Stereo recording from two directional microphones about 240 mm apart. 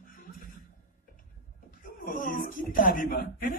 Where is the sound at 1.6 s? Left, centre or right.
Left.